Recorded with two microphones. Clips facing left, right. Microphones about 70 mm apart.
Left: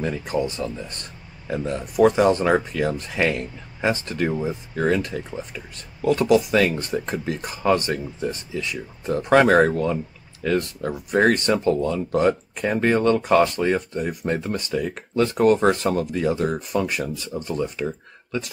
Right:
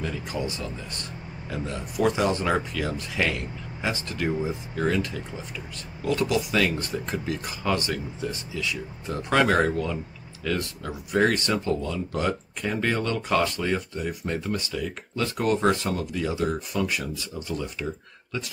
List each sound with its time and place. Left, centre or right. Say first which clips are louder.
0.0 s speech: left 6 dB; left